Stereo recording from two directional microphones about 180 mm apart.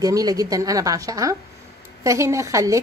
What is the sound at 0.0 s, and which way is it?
A woman's voice, 20° right (ahead or behind).